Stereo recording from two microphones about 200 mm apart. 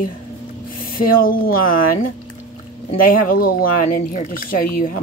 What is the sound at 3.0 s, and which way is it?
Speech, 45° left (ahead or behind).